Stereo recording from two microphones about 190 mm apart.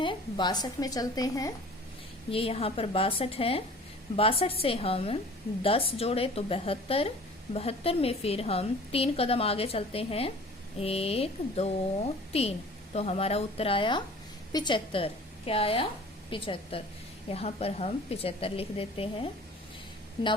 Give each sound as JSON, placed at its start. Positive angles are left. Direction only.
{"t": 0.0, "sound": "speech", "side_deg": 25}
{"t": 2.3, "sound": "a woman's voice", "side_deg": 30}